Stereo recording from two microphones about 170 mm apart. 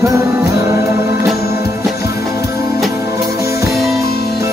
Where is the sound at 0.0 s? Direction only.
15° right (ahead or behind).